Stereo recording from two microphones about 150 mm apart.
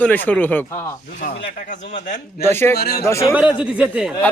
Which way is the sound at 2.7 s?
90° left.